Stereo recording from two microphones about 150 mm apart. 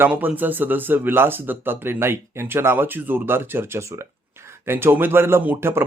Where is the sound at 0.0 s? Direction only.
10° right (ahead or behind).